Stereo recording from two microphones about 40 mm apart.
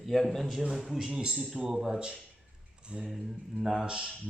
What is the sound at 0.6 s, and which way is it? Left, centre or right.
Speech, centre.